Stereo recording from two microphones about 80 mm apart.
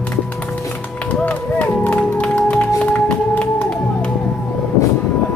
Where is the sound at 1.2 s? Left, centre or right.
Left.